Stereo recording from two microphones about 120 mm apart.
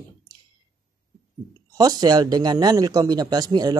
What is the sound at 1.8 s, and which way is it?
Speech, 35° right (ahead or behind).